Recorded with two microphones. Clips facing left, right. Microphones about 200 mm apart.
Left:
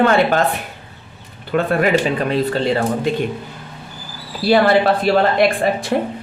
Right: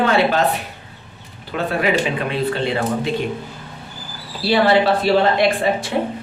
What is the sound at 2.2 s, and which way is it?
Speech, 40° left (ahead or behind).